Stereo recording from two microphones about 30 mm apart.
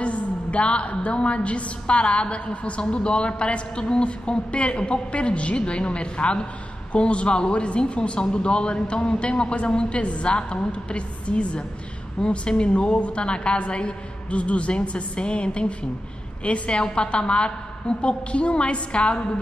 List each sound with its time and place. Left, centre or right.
0.0 s a woman's voice: left
16.4 s a woman's voice: left
16.7 s a woman's voice: left